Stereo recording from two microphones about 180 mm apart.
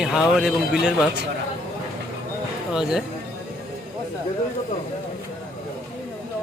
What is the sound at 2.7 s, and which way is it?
Speech, 5° right (ahead or behind).